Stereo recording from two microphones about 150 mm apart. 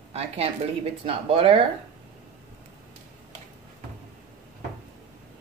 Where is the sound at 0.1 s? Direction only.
45° right (ahead or behind).